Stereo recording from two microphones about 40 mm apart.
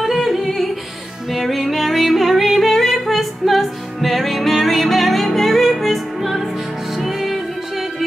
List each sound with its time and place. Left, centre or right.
0.0 s music: centre